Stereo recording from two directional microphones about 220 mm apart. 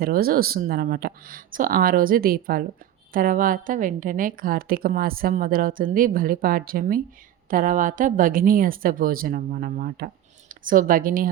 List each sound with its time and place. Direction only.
0.0 s a woman's voice: 40° right (ahead or behind)